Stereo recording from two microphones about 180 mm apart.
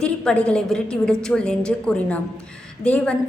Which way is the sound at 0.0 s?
5° left (ahead or behind).